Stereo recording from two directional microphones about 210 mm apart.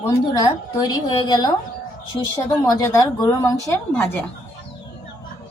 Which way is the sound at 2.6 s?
10° left (ahead or behind).